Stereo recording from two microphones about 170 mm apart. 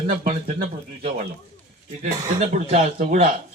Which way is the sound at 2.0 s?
45° right (ahead or behind).